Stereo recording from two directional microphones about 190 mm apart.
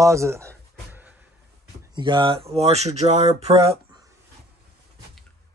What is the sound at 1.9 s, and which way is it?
Speech, 25° right (ahead or behind).